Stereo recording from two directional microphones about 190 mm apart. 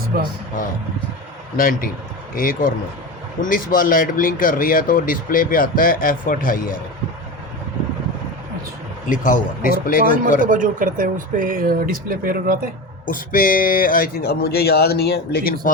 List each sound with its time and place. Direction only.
0.1 s speech: 50° right (ahead or behind)
1.5 s speech: 45° left (ahead or behind)
9.0 s speech: 45° left (ahead or behind)
10.1 s speech: 45° right (ahead or behind)
13.1 s speech: 45° left (ahead or behind)